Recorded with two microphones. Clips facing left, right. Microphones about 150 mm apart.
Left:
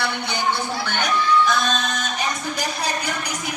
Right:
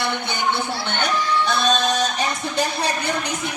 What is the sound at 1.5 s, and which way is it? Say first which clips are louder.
Music: right 2 dB; 35° right (ahead or behind).